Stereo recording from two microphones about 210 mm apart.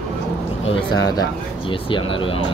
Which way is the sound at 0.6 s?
20° left (ahead or behind).